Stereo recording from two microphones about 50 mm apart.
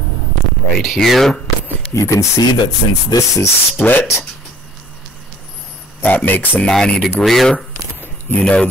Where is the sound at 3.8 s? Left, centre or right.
Left.